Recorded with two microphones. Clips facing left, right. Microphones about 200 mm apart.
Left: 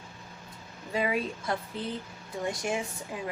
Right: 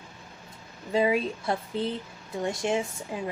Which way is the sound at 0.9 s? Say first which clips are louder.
Right 5 dB; 25° right (ahead or behind).